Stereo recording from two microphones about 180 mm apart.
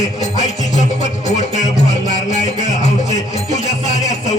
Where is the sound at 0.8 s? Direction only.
40° left (ahead or behind).